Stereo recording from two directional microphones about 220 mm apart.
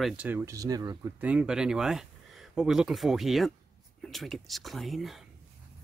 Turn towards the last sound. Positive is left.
turn(degrees=0)  # may be behind; listen again after turning